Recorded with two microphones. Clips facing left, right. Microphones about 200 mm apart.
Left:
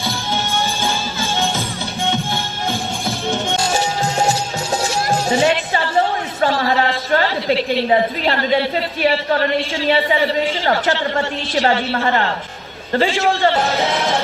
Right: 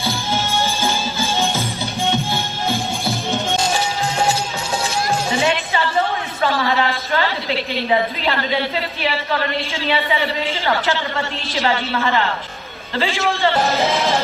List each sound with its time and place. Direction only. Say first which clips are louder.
3.8 s music: left 2 dB; 30° left (ahead or behind)
5.4 s music: left 3 dB; 40° left (ahead or behind)
6.5 s a sound: left 1 dB; 30° left (ahead or behind)
7.1 s a woman's voice: left 4 dB; 45° left (ahead or behind)
11.6 s a woman's voice: left 1 dB; 35° left (ahead or behind)
12.9 s a man's voice: left 5 dB; 50° left (ahead or behind)
13.7 s music: even; centre (ahead or behind)